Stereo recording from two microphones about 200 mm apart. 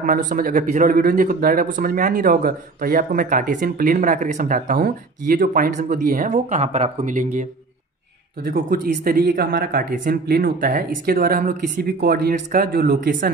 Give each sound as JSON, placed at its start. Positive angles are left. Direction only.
{"t": 0.0, "sound": "a man's voice", "side_deg": -40}
{"t": 8.5, "sound": "a man's voice", "side_deg": -45}